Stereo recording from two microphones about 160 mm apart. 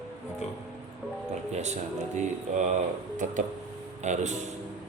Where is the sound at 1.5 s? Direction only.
45° right (ahead or behind).